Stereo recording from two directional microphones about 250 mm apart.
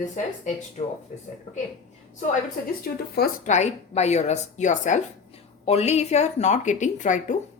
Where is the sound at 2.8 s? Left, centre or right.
Left.